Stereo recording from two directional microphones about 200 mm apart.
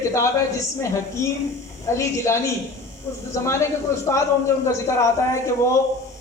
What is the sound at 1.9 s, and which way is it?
A man's voice, 15° left (ahead or behind).